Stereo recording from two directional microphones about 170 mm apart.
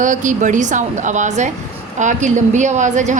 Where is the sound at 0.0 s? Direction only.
50° right (ahead or behind).